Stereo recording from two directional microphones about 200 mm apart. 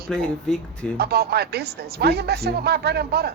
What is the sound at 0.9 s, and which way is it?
Speech, 50° right (ahead or behind).